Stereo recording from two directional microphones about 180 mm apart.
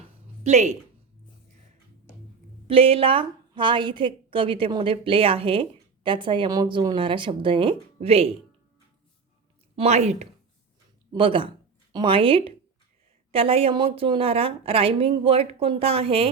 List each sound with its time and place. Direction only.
0.0 s a sound: 40° right (ahead or behind)
2.6 s a woman's voice: 30° right (ahead or behind)
9.7 s a woman's voice: 35° right (ahead or behind)